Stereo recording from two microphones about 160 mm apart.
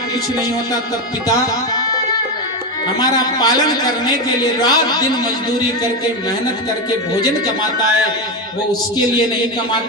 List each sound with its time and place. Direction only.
3.0 s a man's voice: 25° left (ahead or behind)